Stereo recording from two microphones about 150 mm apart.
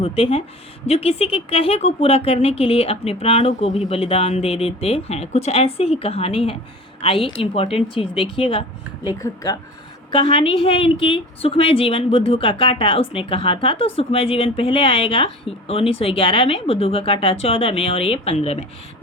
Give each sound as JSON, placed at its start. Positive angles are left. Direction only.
{"t": 0.0, "sound": "a woman's voice", "side_deg": 40}
{"t": 9.0, "sound": "speech", "side_deg": 25}
{"t": 10.1, "sound": "a woman's voice", "side_deg": 35}